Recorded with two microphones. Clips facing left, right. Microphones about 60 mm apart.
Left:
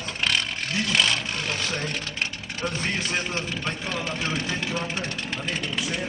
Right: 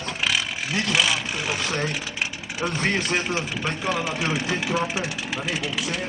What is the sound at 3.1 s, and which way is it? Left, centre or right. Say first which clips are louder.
Speech: right 3 dB; centre.